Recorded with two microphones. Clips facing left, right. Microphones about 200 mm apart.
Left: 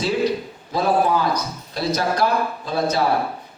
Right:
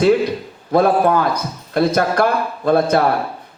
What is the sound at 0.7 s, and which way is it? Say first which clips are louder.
A man's voice: right 5 dB; 55° right (ahead or behind).